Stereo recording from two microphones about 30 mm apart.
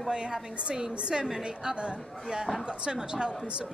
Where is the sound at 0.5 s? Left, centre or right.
Right.